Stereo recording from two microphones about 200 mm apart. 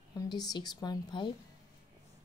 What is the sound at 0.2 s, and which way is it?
A woman's voice, 20° left (ahead or behind).